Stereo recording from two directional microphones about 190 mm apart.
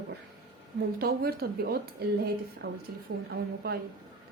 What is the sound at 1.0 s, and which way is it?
A woman's voice, 55° right (ahead or behind).